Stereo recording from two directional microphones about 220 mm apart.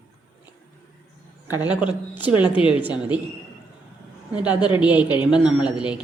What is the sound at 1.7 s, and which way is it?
Speech, 5° right (ahead or behind).